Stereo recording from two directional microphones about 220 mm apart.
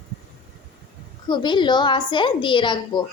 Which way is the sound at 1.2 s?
20° left (ahead or behind).